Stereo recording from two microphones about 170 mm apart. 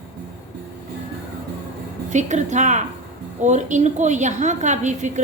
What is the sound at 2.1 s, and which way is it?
A woman's voice, 45° right (ahead or behind).